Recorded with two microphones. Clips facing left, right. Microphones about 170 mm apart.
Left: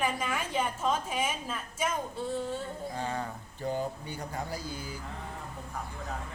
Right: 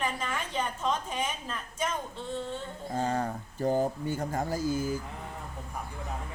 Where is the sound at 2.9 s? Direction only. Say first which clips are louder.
Right 8 dB; 45° right (ahead or behind).